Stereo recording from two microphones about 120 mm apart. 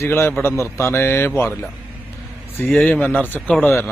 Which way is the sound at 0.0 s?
20° left (ahead or behind).